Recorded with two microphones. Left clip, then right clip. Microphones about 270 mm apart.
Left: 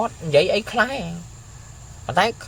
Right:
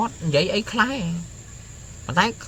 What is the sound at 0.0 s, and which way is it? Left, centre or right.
Speech, centre.